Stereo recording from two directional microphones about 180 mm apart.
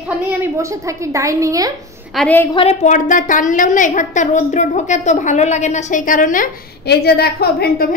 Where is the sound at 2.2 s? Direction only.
10° left (ahead or behind).